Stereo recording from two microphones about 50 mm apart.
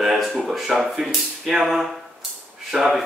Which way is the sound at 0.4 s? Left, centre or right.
Centre.